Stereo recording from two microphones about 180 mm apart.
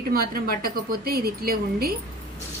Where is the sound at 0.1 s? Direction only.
55° right (ahead or behind).